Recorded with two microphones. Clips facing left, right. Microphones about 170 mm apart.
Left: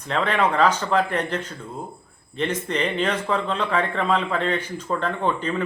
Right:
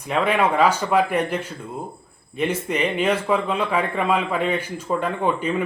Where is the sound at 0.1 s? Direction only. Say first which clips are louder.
Right 2 dB; 10° right (ahead or behind).